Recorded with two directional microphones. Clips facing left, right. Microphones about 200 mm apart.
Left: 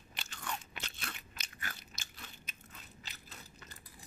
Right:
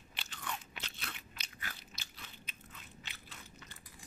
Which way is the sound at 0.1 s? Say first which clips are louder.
Left 1 dB; 45° left (ahead or behind).